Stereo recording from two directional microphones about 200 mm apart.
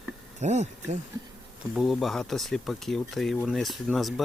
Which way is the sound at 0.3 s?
35° right (ahead or behind).